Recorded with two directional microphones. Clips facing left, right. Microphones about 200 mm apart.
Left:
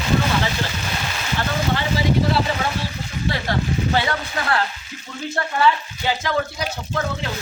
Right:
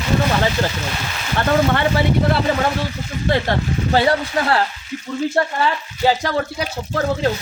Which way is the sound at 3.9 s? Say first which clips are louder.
Right 6 dB; 35° right (ahead or behind).